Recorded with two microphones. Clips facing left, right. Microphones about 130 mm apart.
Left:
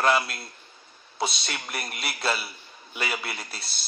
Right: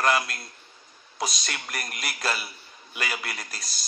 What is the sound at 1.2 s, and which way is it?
A man's voice, 30° left (ahead or behind).